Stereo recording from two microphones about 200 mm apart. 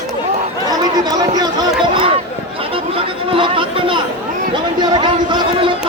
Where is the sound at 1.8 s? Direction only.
25° right (ahead or behind).